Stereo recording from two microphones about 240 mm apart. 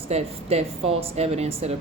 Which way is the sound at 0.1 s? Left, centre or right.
Right.